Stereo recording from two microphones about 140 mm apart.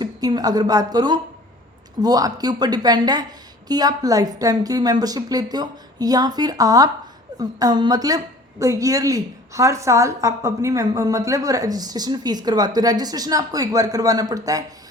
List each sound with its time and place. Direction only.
0.0 s a woman's voice: 30° right (ahead or behind)